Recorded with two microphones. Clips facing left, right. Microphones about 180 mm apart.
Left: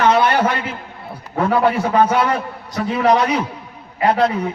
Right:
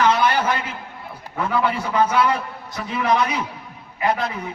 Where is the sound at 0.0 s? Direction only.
60° left (ahead or behind).